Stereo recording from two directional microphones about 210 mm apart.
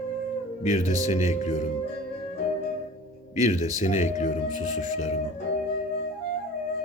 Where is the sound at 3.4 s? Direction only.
35° left (ahead or behind).